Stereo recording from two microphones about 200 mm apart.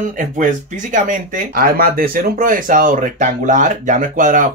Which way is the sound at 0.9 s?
40° right (ahead or behind).